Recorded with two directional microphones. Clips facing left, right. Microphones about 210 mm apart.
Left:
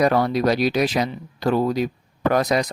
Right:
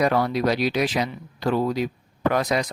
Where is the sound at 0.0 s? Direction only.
40° left (ahead or behind).